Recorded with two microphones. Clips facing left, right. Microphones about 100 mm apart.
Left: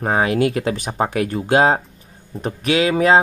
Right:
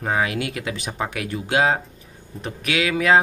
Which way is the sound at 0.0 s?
35° left (ahead or behind).